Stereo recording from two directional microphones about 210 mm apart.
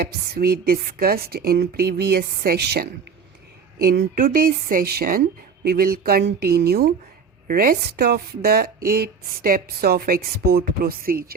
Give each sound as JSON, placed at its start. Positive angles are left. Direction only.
{"t": 0.0, "sound": "a woman's voice", "side_deg": -45}
{"t": 3.8, "sound": "a woman's voice", "side_deg": -45}